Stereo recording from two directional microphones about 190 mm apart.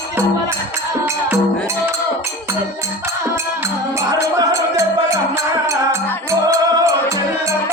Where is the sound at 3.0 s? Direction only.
15° right (ahead or behind).